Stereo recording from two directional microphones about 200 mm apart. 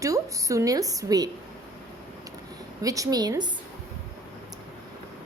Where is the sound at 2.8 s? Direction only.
15° right (ahead or behind).